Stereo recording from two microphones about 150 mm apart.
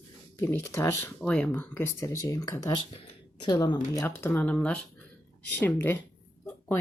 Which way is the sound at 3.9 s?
20° left (ahead or behind).